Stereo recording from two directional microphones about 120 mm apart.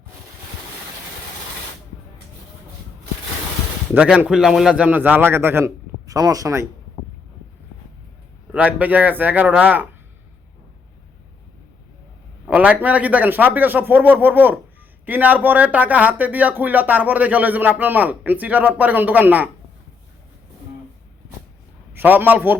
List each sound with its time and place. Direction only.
3.9 s speech: 10° right (ahead or behind); by 6.7 s 25° right (ahead or behind)
8.5 s speech: 15° right (ahead or behind)
12.5 s speech: 10° right (ahead or behind)
21.9 s speech: 15° right (ahead or behind)